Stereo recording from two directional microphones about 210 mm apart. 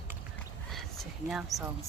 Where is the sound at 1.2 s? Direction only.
Centre (ahead or behind).